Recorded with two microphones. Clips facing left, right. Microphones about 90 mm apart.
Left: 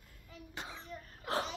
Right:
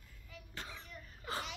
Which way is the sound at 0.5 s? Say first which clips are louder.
Left 3 dB; 20° left (ahead or behind).